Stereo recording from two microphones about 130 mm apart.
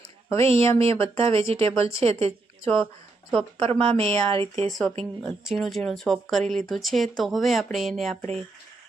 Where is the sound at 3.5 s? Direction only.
50° right (ahead or behind).